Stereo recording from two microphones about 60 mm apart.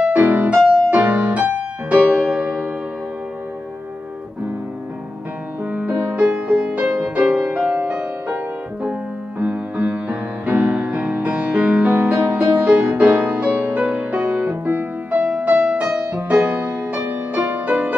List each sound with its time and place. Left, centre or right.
0.1 s music: right
5.7 s music: right
9.4 s music: right
14.6 s music: right
15.3 s music: right